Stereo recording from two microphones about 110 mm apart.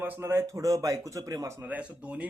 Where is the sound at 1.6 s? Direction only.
15° right (ahead or behind).